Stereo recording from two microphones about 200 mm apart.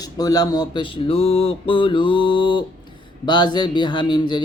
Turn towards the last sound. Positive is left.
turn(degrees=20)  # may be behind; listen again after turning